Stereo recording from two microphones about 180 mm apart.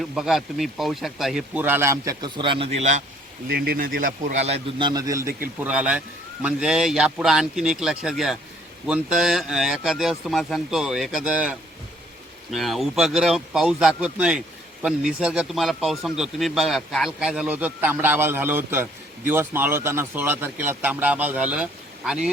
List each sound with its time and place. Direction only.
0.0 s speech: centre (ahead or behind); by 3.0 s 40° right (ahead or behind)
3.5 s a man's voice: 55° right (ahead or behind); by 5.3 s 20° right (ahead or behind)
5.5 s speech: 5° right (ahead or behind)